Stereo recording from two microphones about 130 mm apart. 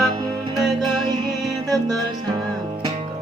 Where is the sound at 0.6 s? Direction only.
Centre (ahead or behind).